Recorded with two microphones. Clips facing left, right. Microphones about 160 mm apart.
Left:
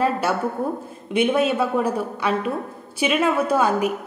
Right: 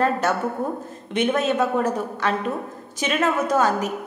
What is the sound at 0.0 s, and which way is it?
A woman's voice, 10° left (ahead or behind).